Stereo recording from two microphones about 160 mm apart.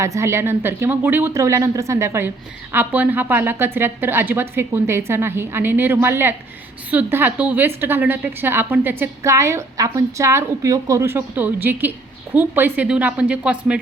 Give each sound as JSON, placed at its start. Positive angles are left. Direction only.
{"t": 0.0, "sound": "a woman's voice", "side_deg": -15}